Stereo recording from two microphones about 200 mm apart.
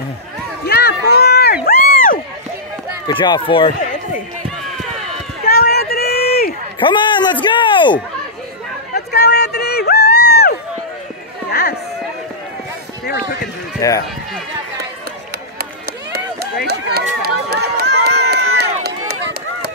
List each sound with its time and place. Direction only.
0.7 s run: 55° left (ahead or behind)
3.1 s speech: 25° left (ahead or behind)
5.4 s run: 50° left (ahead or behind)
6.8 s speech: 25° left (ahead or behind)
8.9 s a sound: 55° left (ahead or behind)
13.0 s run: 60° left (ahead or behind)
13.7 s speech: 15° left (ahead or behind)
16.6 s run: 55° right (ahead or behind)